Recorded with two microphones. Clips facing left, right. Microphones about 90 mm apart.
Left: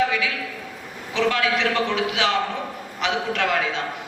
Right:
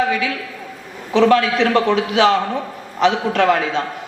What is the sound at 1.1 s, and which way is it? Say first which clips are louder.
A man's voice: right 8 dB; 35° right (ahead or behind).